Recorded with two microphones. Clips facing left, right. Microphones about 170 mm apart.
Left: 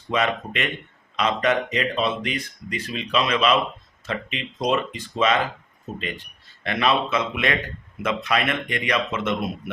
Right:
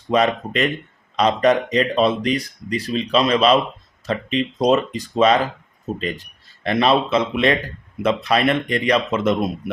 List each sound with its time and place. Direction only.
0.1 s speech: 35° right (ahead or behind)